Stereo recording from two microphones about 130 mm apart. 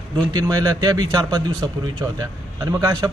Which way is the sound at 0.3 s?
25° right (ahead or behind).